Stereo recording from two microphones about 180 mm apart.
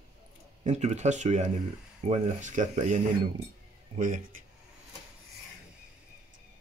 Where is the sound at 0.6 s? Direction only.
40° right (ahead or behind).